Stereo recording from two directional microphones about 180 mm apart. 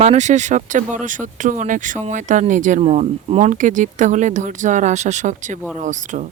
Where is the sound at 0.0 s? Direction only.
40° right (ahead or behind).